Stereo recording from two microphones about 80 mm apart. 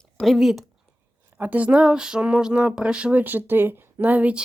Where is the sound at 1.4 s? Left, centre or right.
Centre.